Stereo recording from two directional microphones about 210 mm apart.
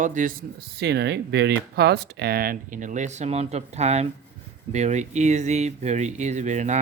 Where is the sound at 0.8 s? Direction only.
55° right (ahead or behind).